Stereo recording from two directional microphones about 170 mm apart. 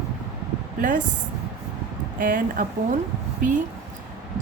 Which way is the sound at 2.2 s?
55° right (ahead or behind).